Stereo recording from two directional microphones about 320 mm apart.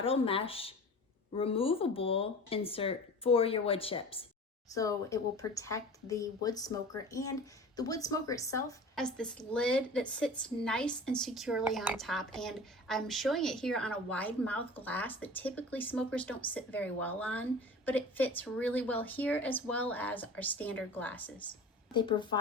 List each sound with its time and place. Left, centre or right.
0.0 s a woman's voice: centre